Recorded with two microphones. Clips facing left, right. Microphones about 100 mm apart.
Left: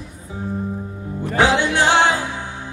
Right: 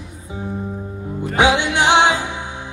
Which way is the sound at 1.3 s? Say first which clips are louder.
Right 1 dB; 15° right (ahead or behind).